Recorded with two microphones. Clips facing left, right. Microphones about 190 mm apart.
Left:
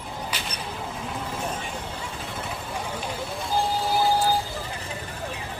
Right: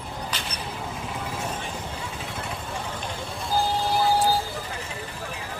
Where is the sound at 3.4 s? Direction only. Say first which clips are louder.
Right 1 dB; centre (ahead or behind).